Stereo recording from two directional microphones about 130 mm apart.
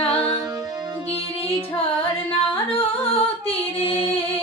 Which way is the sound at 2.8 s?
45° left (ahead or behind).